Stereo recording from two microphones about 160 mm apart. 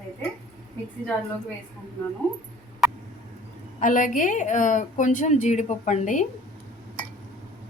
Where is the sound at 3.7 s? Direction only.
55° left (ahead or behind).